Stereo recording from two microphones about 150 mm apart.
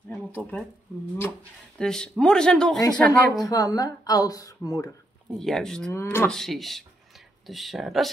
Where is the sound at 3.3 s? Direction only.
25° left (ahead or behind).